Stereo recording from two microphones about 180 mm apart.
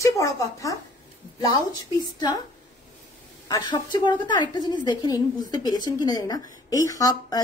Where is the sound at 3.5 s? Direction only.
25° left (ahead or behind).